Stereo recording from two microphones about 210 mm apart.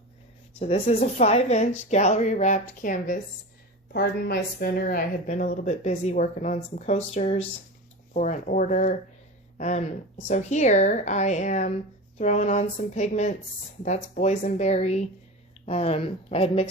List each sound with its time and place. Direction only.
0.6 s speech: 30° left (ahead or behind)